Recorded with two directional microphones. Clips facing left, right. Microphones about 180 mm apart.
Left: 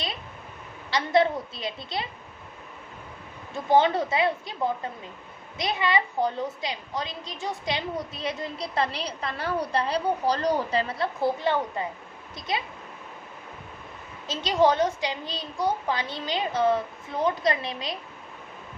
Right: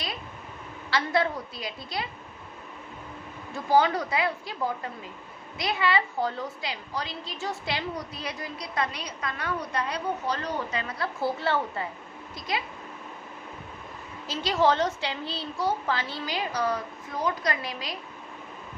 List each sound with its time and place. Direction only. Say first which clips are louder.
0.9 s a woman's voice: left 4 dB; 20° left (ahead or behind)
3.5 s a woman's voice: left 2 dB; 20° left (ahead or behind)
14.3 s a woman's voice: left 2 dB; 20° left (ahead or behind)